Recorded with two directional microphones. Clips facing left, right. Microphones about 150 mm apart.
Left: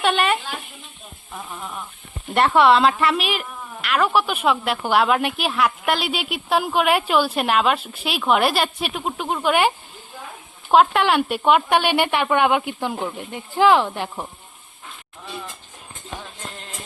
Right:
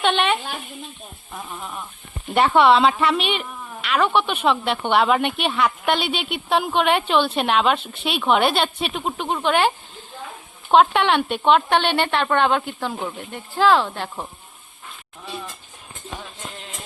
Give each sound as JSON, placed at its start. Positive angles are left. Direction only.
{"t": 0.0, "sound": "speech", "side_deg": 5}
{"t": 1.3, "sound": "a woman's voice", "side_deg": -5}
{"t": 16.5, "sound": "music", "side_deg": 0}